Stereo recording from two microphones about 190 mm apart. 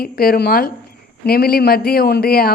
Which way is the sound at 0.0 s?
50° left (ahead or behind).